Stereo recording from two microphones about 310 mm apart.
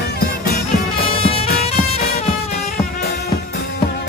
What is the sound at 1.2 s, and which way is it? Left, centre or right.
Music, centre.